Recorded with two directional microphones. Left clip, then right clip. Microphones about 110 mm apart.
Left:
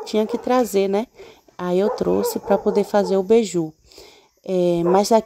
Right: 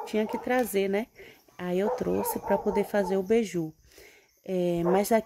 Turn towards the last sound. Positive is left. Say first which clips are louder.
# left 8 dB
turn(degrees=30)  # may be behind; listen again after turning